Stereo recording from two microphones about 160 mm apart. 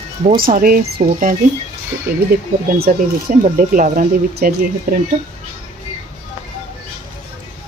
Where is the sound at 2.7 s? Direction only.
65° right (ahead or behind).